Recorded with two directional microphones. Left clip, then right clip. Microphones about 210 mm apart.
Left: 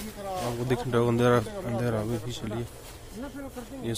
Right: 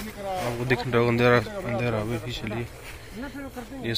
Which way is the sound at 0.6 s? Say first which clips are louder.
Right 3 dB; 15° left (ahead or behind).